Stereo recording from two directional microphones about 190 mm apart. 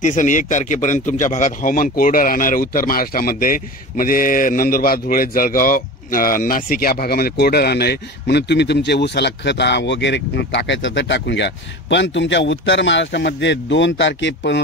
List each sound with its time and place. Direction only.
0.0 s a man's voice: 40° left (ahead or behind); by 14.6 s 70° left (ahead or behind)